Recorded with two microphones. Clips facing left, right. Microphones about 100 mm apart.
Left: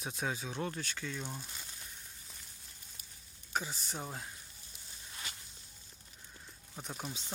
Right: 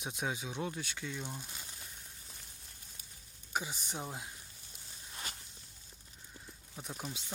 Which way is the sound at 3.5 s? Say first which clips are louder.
Even; 15° right (ahead or behind).